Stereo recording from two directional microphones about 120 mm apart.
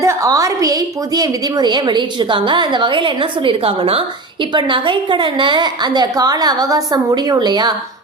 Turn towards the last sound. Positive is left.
turn(degrees=-35)  # may be behind; listen again after turning